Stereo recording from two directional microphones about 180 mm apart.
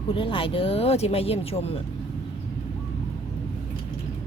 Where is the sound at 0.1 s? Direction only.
30° left (ahead or behind).